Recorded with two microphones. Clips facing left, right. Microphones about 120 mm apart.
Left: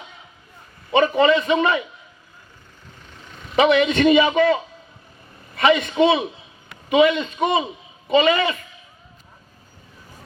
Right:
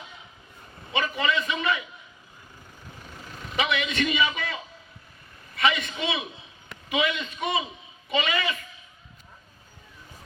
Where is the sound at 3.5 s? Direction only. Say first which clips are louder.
Left 11 dB; 40° left (ahead or behind).